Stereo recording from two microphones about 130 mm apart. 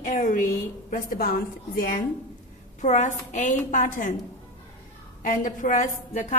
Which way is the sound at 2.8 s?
65° left (ahead or behind).